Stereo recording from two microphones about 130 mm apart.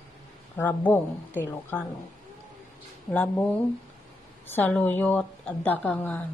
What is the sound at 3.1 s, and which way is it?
Speech, 10° left (ahead or behind).